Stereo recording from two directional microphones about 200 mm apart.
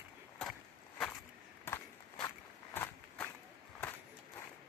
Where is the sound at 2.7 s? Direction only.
10° left (ahead or behind).